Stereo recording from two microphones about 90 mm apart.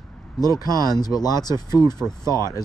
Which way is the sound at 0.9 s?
45° left (ahead or behind).